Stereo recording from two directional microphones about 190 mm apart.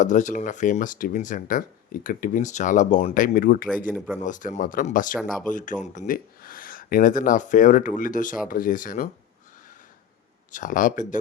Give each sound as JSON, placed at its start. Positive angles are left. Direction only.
{"t": 0.0, "sound": "speech", "side_deg": 40}
{"t": 3.9, "sound": "speech", "side_deg": -5}
{"t": 4.2, "sound": "speech", "side_deg": 45}
{"t": 10.5, "sound": "speech", "side_deg": 45}